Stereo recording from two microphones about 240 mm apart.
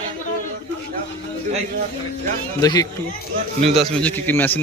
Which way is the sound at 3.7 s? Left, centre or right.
Centre.